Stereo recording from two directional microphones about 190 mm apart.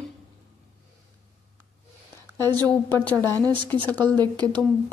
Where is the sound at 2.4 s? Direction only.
20° right (ahead or behind).